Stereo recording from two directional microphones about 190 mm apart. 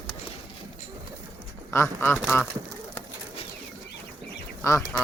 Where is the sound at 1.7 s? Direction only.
15° left (ahead or behind).